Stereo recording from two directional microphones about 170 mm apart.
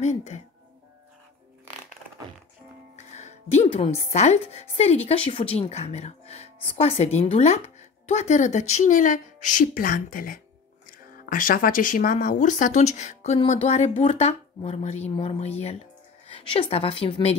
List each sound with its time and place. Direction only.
0.0 s speech: 40° left (ahead or behind)
3.1 s speech: 40° left (ahead or behind)